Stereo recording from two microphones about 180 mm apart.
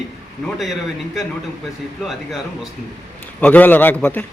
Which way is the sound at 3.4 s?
10° left (ahead or behind).